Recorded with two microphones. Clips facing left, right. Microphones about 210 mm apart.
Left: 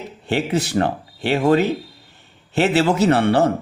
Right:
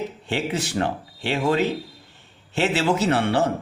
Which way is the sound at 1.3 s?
40° left (ahead or behind).